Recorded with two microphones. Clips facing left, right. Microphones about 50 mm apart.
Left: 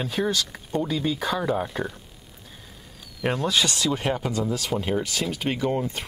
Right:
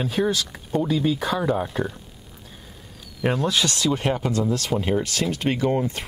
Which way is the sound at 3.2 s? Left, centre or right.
Centre.